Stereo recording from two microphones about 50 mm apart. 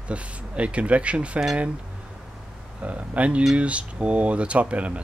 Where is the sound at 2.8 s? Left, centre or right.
Right.